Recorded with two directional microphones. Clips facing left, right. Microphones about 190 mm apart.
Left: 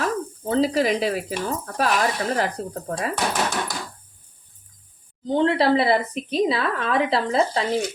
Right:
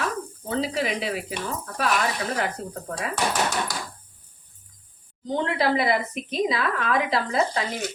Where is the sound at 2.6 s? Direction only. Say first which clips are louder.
Left 4 dB; 35° left (ahead or behind).